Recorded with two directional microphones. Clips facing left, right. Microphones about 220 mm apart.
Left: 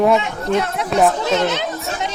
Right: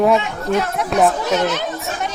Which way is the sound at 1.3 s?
20° left (ahead or behind).